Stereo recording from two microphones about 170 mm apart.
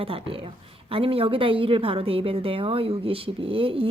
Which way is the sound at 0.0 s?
35° right (ahead or behind).